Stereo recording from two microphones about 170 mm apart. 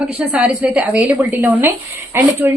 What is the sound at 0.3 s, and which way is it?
A woman's voice, 5° right (ahead or behind).